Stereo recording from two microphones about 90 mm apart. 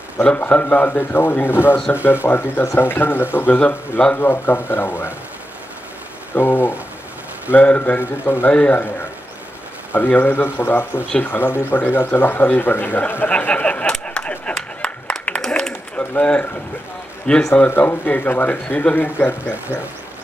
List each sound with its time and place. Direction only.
0.2 s speech: 15° left (ahead or behind)
6.3 s speech: 25° left (ahead or behind)
9.9 s speech: 20° left (ahead or behind)
17.6 s speech: 25° left (ahead or behind)